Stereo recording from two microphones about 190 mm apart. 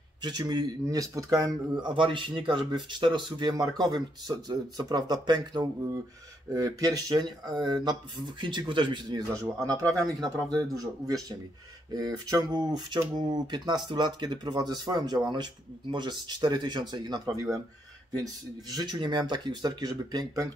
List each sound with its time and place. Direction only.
0.2 s speech: 20° right (ahead or behind)